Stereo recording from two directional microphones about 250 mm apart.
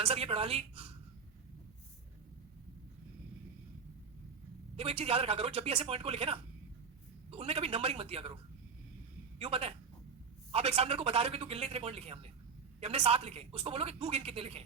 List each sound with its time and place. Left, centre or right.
0.0 s a woman's voice: right
4.8 s a woman's voice: right
9.4 s a woman's voice: right